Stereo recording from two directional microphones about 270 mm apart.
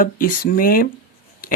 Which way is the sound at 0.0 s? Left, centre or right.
Left.